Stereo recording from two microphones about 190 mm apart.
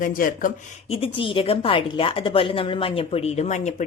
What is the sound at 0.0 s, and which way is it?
Speech, 45° left (ahead or behind).